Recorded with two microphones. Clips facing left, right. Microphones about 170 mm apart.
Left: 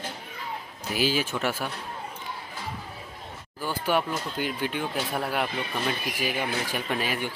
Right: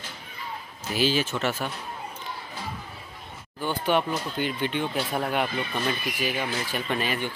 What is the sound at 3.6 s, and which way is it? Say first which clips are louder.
A man's voice: right 2 dB; 5° left (ahead or behind).